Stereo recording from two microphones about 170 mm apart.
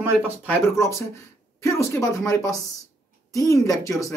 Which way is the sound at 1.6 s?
15° left (ahead or behind).